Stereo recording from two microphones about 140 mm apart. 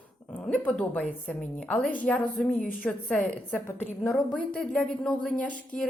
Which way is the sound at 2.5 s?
65° left (ahead or behind).